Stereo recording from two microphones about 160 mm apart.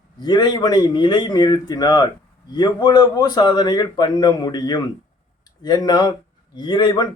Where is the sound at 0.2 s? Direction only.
25° left (ahead or behind).